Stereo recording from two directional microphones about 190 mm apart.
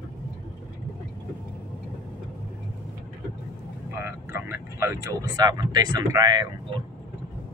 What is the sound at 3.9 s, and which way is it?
Vehicle, 10° right (ahead or behind).